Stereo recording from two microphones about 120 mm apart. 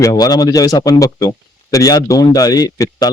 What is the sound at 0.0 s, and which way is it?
A man's voice, 30° left (ahead or behind).